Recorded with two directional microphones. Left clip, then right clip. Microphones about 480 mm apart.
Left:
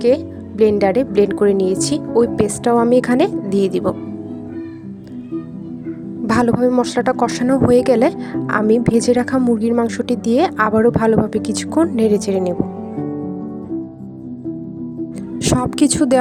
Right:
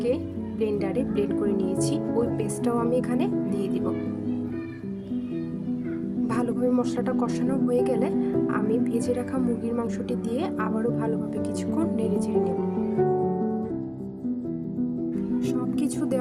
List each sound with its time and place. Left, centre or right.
0.6 s speech: centre
6.2 s speech: centre
15.4 s a woman's voice: centre